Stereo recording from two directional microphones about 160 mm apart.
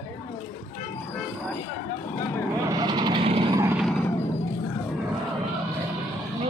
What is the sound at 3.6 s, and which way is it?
Vehicle, 15° right (ahead or behind).